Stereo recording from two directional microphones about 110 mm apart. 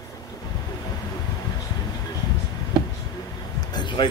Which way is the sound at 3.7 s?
45° left (ahead or behind).